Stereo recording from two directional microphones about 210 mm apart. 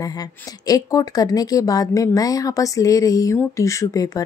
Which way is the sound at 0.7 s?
15° left (ahead or behind).